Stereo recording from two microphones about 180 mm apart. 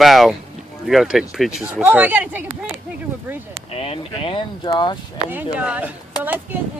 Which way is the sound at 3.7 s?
35° left (ahead or behind).